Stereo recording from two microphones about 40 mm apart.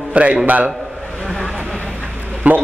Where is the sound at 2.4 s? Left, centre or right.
Right.